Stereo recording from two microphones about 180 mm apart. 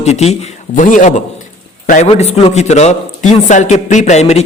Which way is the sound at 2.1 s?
35° left (ahead or behind).